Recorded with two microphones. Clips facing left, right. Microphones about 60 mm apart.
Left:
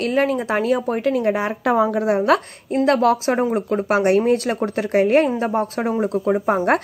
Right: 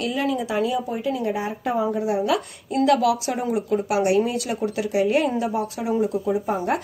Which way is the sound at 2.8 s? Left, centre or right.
Left.